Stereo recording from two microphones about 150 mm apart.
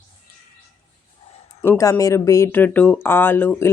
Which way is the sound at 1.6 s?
20° left (ahead or behind).